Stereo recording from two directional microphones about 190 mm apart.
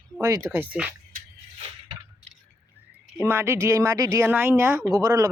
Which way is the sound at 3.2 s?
10° right (ahead or behind).